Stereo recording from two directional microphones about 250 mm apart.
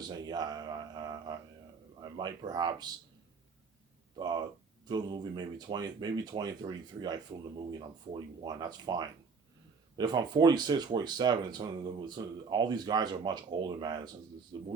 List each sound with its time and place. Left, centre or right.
0.0 s a sound: centre
2.0 s speech: centre
4.1 s speech: centre